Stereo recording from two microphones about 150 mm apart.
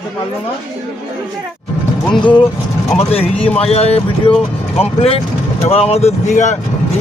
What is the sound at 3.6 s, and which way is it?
Speech, 40° left (ahead or behind).